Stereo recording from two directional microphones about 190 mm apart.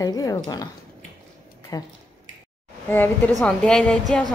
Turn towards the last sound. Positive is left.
turn(degrees=5)  # may be behind; listen again after turning